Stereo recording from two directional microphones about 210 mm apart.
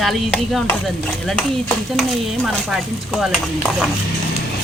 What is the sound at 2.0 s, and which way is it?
Speech, centre (ahead or behind).